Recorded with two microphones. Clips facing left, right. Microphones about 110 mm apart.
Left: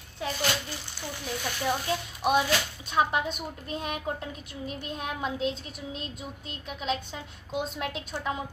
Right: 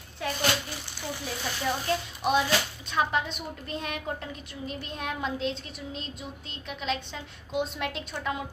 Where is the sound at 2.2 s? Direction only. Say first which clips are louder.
Left 1 dB; 10° left (ahead or behind).